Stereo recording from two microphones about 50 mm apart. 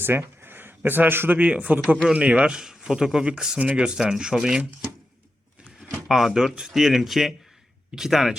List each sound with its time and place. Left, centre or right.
0.0 s a sound: right
0.9 s a man's voice: right
1.4 s speech: right; by 4.6 s centre
6.1 s speech: centre